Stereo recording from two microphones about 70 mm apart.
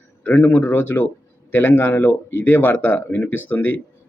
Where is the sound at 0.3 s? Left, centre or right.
Left.